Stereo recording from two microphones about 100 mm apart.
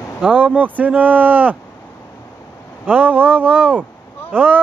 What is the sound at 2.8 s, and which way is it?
Speech, 15° right (ahead or behind).